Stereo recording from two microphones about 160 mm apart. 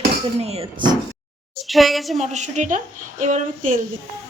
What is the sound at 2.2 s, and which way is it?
A woman's voice, 50° right (ahead or behind).